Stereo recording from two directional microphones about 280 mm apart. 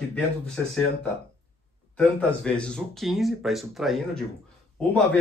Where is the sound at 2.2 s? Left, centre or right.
Centre.